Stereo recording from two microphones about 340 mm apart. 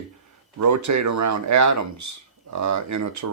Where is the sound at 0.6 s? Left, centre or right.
Right.